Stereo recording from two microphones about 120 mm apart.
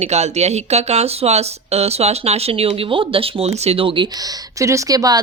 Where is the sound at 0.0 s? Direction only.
65° right (ahead or behind); by 4.3 s 40° right (ahead or behind).